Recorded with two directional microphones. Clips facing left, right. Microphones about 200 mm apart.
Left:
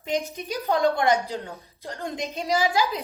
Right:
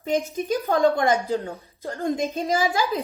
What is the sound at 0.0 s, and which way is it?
A woman's voice, 50° right (ahead or behind).